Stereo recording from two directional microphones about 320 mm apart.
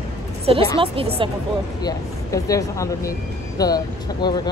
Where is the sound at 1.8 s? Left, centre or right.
Centre.